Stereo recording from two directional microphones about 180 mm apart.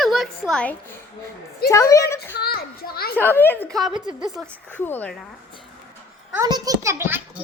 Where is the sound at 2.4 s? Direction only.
60° left (ahead or behind).